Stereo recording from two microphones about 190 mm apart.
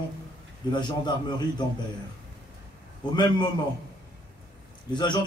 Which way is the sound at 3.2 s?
25° left (ahead or behind).